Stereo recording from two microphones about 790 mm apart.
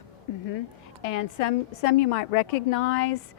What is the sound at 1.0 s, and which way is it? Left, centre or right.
A woman's voice, left.